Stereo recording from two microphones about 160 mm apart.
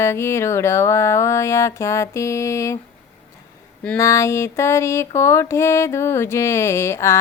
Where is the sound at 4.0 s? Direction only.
20° left (ahead or behind).